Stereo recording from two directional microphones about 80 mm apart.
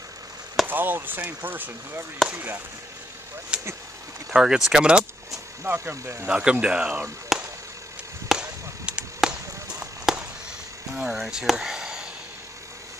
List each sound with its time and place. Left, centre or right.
0.7 s speech: right
3.5 s speech: centre
5.6 s speech: right
6.2 s speech: centre
7.3 s chop: centre
9.8 s a sound: centre
10.9 s speech: centre